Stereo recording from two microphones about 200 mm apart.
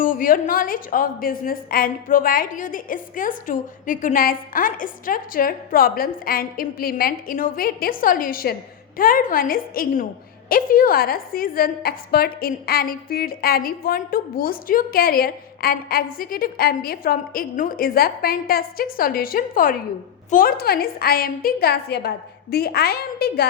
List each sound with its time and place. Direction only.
0.0 s a woman's voice: 45° left (ahead or behind)